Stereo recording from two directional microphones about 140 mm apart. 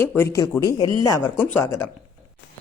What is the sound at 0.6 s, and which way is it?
Speech, 25° left (ahead or behind).